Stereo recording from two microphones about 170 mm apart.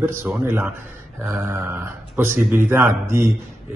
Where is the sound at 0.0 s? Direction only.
15° right (ahead or behind).